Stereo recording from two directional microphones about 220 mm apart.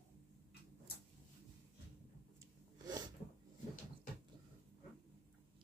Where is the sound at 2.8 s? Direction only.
20° right (ahead or behind).